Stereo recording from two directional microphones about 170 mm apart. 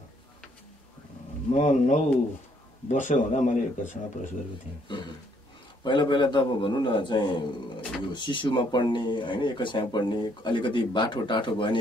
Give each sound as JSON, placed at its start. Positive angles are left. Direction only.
{"t": 1.5, "sound": "speech", "side_deg": 45}
{"t": 4.8, "sound": "speech", "side_deg": 30}